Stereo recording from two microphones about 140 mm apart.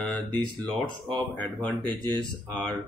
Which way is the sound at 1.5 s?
30° right (ahead or behind).